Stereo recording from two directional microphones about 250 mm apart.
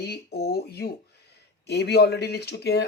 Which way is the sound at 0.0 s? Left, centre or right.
Left.